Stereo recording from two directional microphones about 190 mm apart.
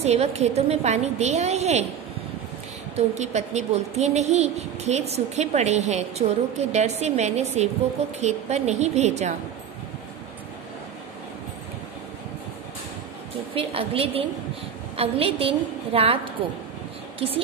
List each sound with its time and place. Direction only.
0.0 s a woman's voice: 35° right (ahead or behind)
3.2 s a woman's voice: 35° right (ahead or behind)
13.6 s a woman's voice: 30° right (ahead or behind)